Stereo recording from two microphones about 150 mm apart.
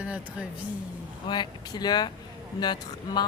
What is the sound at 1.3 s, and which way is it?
Speech, 30° left (ahead or behind).